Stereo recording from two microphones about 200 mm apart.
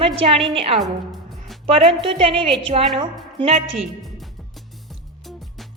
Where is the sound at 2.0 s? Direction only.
25° right (ahead or behind).